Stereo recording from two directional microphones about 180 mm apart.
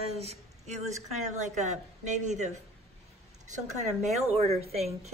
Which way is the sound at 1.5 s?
40° right (ahead or behind).